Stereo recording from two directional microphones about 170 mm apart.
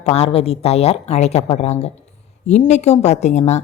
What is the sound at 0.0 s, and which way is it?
A woman's voice, 40° left (ahead or behind).